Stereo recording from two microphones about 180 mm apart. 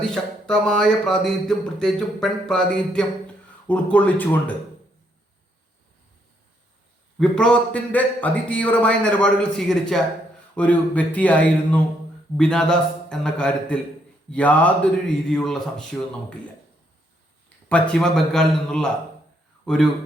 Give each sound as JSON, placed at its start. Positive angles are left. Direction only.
{"t": 0.0, "sound": "a man's voice", "side_deg": 5}
{"t": 7.2, "sound": "a man's voice", "side_deg": 5}
{"t": 17.7, "sound": "a man's voice", "side_deg": 5}